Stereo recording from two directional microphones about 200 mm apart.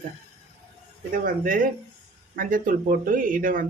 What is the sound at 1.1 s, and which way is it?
Speech, 45° right (ahead or behind).